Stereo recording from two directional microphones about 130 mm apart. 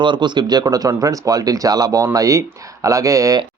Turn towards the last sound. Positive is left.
turn(degrees=-25)  # may be behind; listen again after turning